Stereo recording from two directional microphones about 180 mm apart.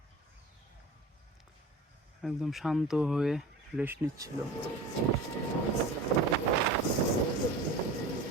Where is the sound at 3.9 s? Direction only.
20° right (ahead or behind).